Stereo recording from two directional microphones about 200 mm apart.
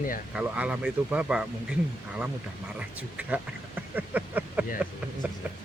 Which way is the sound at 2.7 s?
5° right (ahead or behind).